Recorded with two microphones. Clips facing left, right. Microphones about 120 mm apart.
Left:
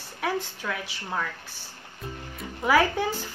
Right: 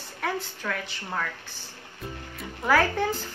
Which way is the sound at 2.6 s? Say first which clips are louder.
Left 1 dB; 5° left (ahead or behind).